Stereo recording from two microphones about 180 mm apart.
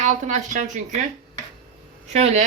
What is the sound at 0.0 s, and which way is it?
Speech, 40° right (ahead or behind).